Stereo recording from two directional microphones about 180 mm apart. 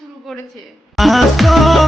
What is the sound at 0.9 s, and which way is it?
Music, centre (ahead or behind).